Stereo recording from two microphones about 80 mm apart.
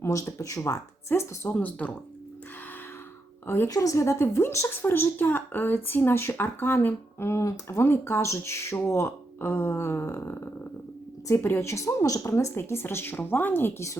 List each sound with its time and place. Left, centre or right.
0.0 s a woman's voice: left
1.5 s speech: centre
3.4 s a woman's voice: left
3.7 s a woman's voice: left